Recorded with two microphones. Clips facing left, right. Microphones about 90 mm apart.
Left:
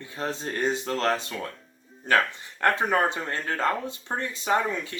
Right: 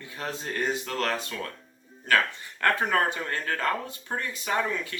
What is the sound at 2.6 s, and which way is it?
Speech, 20° left (ahead or behind).